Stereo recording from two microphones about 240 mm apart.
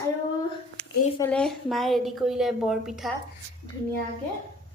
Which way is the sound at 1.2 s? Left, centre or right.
Centre.